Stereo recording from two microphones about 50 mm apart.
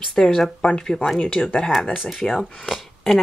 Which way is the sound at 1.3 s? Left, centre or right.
Centre.